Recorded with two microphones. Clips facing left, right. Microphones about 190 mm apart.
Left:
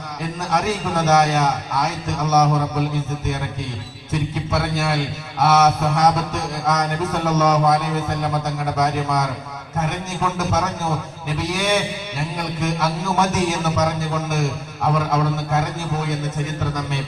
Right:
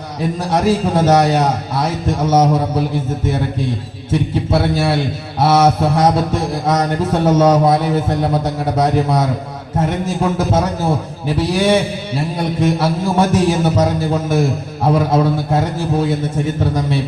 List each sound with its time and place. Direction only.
0.2 s a man's voice: 30° right (ahead or behind)